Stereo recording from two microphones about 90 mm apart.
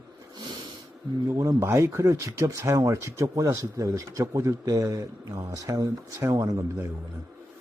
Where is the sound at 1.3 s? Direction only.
30° right (ahead or behind).